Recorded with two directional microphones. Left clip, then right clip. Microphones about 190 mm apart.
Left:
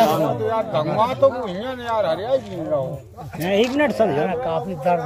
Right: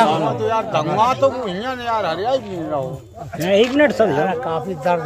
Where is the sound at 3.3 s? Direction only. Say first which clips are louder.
Right 4 dB; 5° right (ahead or behind).